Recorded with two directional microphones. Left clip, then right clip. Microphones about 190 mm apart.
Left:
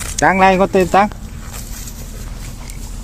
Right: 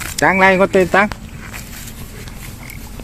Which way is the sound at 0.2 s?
5° left (ahead or behind).